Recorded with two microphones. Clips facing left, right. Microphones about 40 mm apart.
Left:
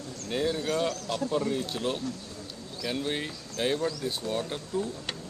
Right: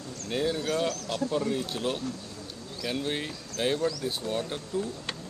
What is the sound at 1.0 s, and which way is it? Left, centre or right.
Speech, right.